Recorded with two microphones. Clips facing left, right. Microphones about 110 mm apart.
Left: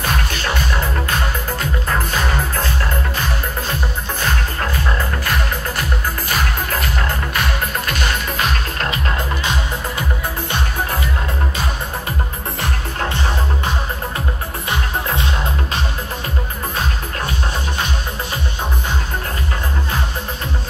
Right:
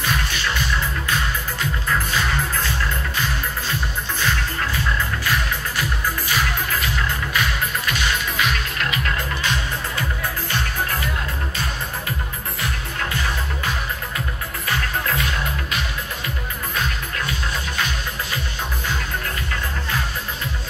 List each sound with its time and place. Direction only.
0.0 s music: 45° left (ahead or behind)
4.2 s music: 45° left (ahead or behind)
9.4 s music: 20° left (ahead or behind)
13.0 s music: 30° left (ahead or behind)